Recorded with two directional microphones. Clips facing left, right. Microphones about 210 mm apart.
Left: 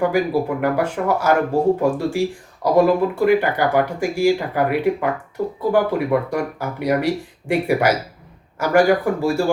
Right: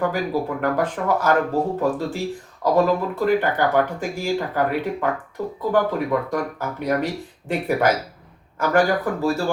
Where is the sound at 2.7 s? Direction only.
10° left (ahead or behind).